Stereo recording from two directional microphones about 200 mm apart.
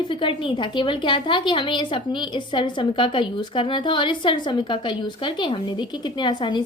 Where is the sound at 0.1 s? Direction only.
25° left (ahead or behind).